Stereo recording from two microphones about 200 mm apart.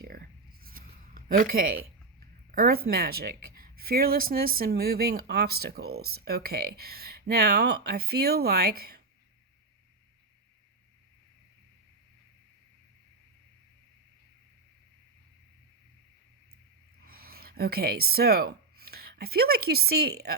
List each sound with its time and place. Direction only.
0.6 s writing: 45° right (ahead or behind)
2.5 s speech: 50° right (ahead or behind)
17.1 s speech: 50° right (ahead or behind)